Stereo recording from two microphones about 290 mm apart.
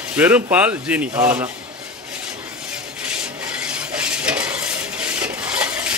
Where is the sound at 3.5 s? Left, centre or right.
Centre.